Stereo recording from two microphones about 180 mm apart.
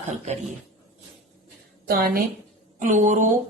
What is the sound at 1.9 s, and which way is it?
Speech, 55° right (ahead or behind).